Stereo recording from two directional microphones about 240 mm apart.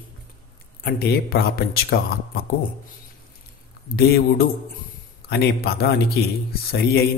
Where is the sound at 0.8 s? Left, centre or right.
Left.